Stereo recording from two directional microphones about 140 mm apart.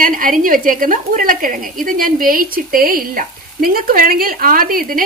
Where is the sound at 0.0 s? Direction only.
75° right (ahead or behind).